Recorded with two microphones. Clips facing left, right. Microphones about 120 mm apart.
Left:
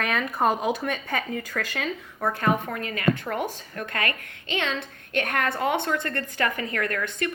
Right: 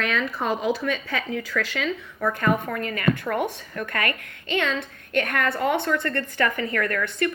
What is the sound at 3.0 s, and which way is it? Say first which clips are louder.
A woman's voice: right 1 dB; 30° left (ahead or behind).